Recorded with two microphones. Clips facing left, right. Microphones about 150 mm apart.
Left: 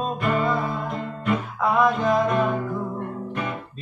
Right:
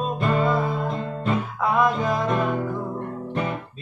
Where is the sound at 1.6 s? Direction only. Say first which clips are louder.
Left 1 dB; centre (ahead or behind).